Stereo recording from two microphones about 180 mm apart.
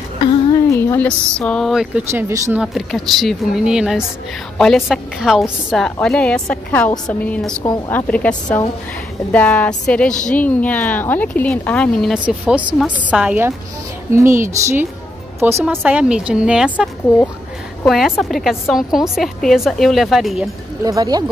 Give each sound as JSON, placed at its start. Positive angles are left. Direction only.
{"t": 0.5, "sound": "a woman's voice", "side_deg": 15}
{"t": 2.6, "sound": "a woman's voice", "side_deg": 0}
{"t": 20.8, "sound": "speech", "side_deg": -20}